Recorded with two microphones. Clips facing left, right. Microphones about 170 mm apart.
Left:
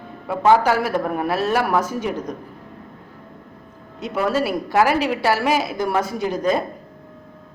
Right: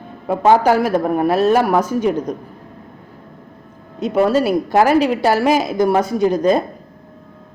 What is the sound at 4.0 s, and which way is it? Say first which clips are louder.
Speech: right 7 dB; 20° right (ahead or behind).